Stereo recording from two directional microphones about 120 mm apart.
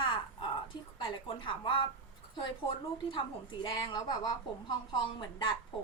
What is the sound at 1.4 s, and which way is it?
Speech, 45° left (ahead or behind).